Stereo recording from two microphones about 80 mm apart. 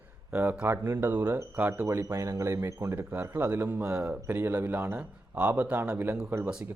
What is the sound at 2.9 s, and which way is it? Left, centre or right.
A man's voice, right.